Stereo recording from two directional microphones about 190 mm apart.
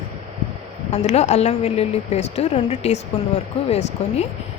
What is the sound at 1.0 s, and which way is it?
A woman's voice, 35° left (ahead or behind).